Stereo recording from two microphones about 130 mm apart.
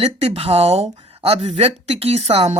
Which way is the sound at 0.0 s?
50° right (ahead or behind).